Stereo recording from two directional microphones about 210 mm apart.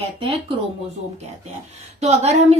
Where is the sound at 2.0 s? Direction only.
30° right (ahead or behind).